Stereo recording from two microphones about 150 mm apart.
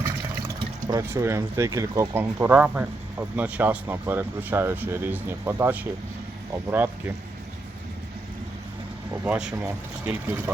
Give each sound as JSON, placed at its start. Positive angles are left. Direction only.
{"t": 0.6, "sound": "speech", "side_deg": -25}
{"t": 9.2, "sound": "speech", "side_deg": -5}